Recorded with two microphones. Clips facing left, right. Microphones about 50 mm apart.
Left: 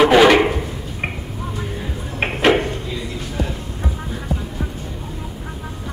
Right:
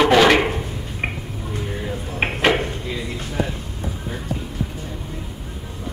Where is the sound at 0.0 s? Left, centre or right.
Centre.